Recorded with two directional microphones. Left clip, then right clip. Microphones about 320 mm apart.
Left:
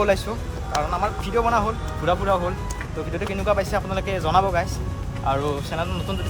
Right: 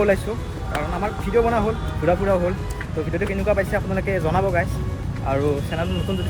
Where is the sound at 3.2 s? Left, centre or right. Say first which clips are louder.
Even; centre.